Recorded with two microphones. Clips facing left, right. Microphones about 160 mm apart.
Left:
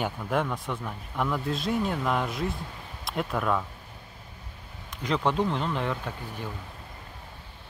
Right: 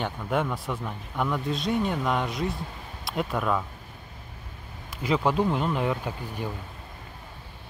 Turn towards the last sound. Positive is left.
turn(degrees=-10)  # may be behind; listen again after turning